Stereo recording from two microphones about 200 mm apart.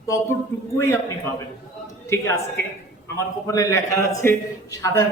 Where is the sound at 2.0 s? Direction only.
15° left (ahead or behind).